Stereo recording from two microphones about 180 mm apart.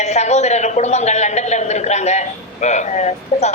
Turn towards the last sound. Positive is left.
turn(degrees=40)  # may be behind; listen again after turning